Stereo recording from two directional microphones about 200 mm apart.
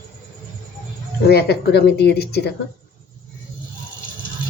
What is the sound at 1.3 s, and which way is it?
A man's voice, 55° left (ahead or behind).